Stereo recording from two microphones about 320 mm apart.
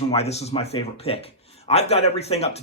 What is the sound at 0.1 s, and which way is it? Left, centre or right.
Speech, centre.